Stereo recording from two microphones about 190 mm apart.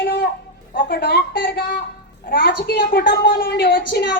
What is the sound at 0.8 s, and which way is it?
A woman's voice, 55° left (ahead or behind).